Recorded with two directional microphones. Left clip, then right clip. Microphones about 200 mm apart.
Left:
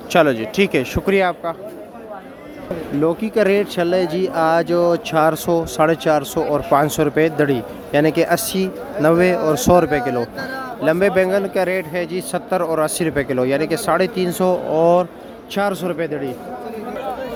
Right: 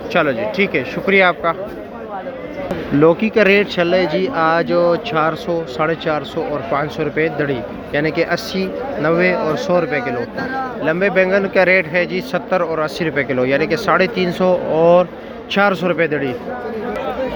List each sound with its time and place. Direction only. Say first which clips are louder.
0.1 s speech: left 1 dB; 35° left (ahead or behind)
1.1 s a man's voice: right 5 dB; 20° left (ahead or behind)
3.0 s a man's voice: right 5 dB; 15° left (ahead or behind)